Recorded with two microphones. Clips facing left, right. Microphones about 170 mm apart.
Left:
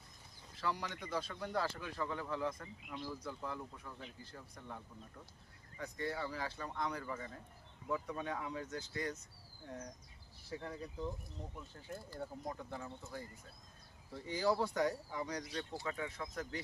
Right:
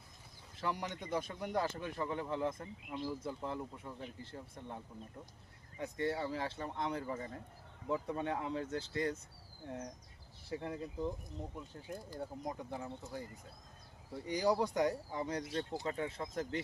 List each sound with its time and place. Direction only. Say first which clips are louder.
0.5 s speech: right 1 dB; 20° right (ahead or behind)
10.6 s speech: right 4 dB; 20° right (ahead or behind)